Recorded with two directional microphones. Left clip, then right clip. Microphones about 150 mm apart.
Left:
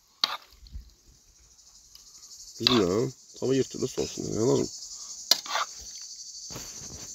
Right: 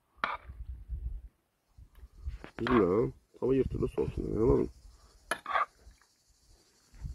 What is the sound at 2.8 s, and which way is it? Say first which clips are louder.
Cricket: left 2 dB; 65° left (ahead or behind).